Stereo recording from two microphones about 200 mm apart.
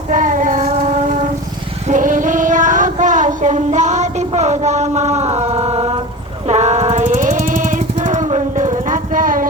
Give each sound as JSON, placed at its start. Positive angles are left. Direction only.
{"t": 0.1, "sound": "child singing", "side_deg": -40}
{"t": 1.9, "sound": "female singing", "side_deg": -40}
{"t": 6.5, "sound": "jackhammer", "side_deg": -35}